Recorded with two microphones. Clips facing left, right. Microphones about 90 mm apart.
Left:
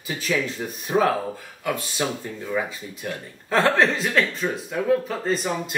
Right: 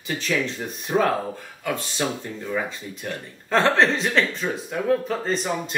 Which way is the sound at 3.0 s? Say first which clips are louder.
Right 1 dB; 5° left (ahead or behind).